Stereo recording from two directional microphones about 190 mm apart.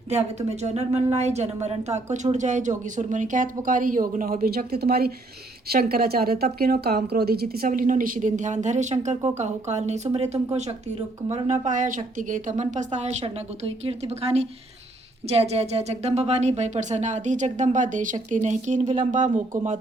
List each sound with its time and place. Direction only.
0.1 s a woman's voice: 35° right (ahead or behind)